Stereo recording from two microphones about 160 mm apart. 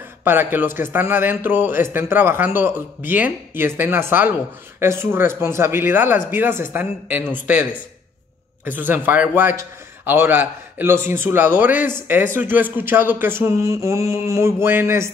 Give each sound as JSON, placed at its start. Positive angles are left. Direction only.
{"t": 0.2, "sound": "a man's voice", "side_deg": -15}
{"t": 8.6, "sound": "a man's voice", "side_deg": -10}